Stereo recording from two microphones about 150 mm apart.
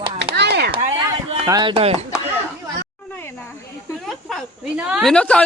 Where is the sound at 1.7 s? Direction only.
45° right (ahead or behind).